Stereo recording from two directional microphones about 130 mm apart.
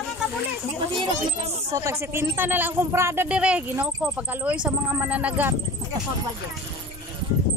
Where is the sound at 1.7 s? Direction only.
25° right (ahead or behind).